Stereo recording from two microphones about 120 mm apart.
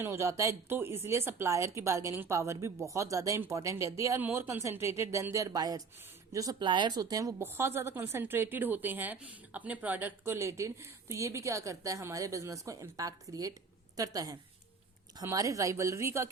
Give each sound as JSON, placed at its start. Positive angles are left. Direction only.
{"t": 0.0, "sound": "a woman's voice", "side_deg": -25}